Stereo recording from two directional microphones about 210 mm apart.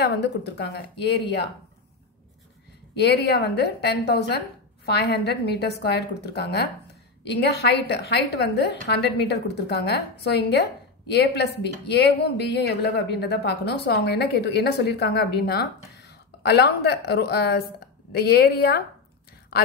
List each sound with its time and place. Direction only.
0.0 s a woman's voice: 55° left (ahead or behind)
2.9 s a woman's voice: 50° left (ahead or behind)